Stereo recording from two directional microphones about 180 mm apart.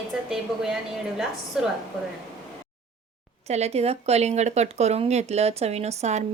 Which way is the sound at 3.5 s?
35° right (ahead or behind).